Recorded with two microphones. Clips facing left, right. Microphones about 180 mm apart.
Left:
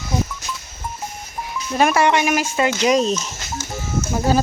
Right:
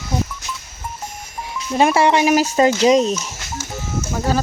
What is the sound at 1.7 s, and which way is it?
Speech, 25° right (ahead or behind).